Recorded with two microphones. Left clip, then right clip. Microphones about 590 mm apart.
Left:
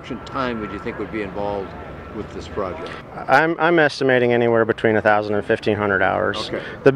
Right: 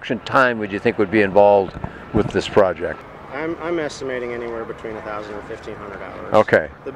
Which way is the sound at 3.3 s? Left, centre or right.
Left.